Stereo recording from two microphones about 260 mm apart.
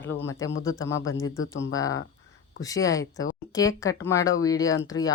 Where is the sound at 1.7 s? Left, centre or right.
Centre.